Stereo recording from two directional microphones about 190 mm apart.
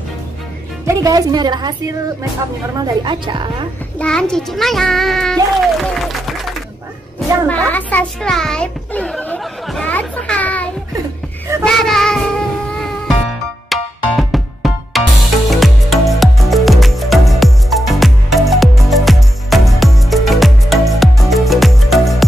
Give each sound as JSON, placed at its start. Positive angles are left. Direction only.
{"t": 0.8, "sound": "a woman's voice", "side_deg": -20}
{"t": 2.8, "sound": "a woman's voice", "side_deg": -25}
{"t": 4.0, "sound": "a child's voice", "side_deg": 5}
{"t": 11.6, "sound": "child singing", "side_deg": 0}
{"t": 13.7, "sound": "music", "side_deg": 0}